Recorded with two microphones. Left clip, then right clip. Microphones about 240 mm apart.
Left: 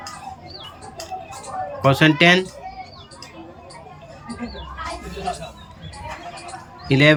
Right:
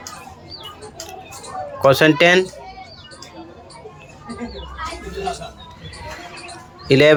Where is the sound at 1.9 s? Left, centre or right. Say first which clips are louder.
Right 2 dB; centre.